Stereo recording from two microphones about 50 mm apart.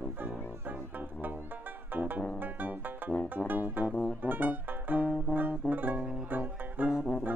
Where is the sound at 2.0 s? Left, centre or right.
Right.